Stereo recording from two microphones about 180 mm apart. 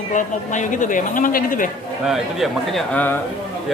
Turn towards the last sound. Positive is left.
turn(degrees=10)  # may be behind; listen again after turning